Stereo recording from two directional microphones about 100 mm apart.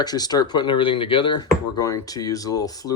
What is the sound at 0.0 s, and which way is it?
Speech, 40° left (ahead or behind).